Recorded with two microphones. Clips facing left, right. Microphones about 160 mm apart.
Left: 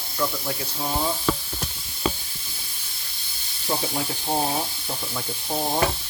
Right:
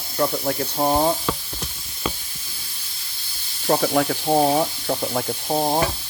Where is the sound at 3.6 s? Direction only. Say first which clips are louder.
Right 8 dB; 60° right (ahead or behind).